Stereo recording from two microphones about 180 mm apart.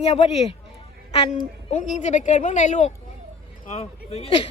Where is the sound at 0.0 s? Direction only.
35° left (ahead or behind).